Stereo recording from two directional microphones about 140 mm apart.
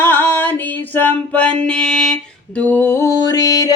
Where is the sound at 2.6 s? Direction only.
15° left (ahead or behind).